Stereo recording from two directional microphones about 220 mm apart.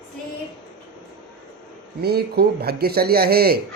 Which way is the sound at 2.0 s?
45° right (ahead or behind).